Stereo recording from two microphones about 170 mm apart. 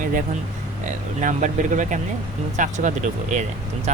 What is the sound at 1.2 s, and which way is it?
Speech, 45° right (ahead or behind).